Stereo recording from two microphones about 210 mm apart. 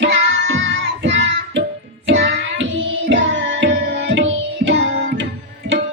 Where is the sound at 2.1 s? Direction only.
60° right (ahead or behind).